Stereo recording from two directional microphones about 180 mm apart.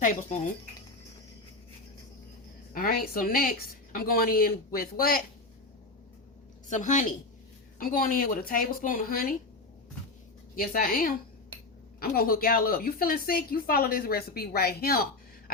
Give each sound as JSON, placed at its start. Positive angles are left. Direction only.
{"t": 2.7, "sound": "a woman's voice", "side_deg": 55}
{"t": 6.7, "sound": "speech", "side_deg": 45}
{"t": 10.5, "sound": "a woman's voice", "side_deg": 50}